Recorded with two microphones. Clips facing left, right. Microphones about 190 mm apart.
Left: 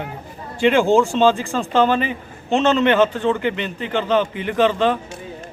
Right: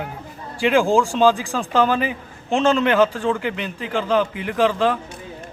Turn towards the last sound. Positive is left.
turn(degrees=-5)  # may be behind; listen again after turning